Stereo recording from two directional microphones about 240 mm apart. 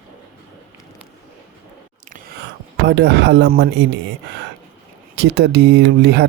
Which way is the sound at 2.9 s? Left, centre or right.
Right.